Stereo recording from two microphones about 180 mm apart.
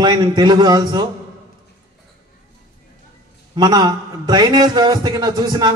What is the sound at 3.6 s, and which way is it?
A man's voice, 25° right (ahead or behind).